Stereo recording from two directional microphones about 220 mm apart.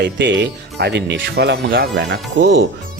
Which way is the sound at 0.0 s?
50° right (ahead or behind).